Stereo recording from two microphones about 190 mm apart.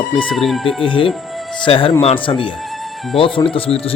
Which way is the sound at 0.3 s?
Centre (ahead or behind).